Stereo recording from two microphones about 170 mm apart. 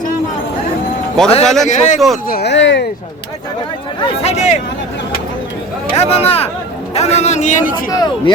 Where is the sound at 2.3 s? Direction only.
75° left (ahead or behind); by 2.8 s 90° left.